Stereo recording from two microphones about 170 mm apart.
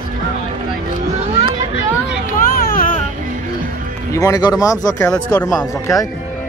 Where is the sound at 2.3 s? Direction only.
55° left (ahead or behind).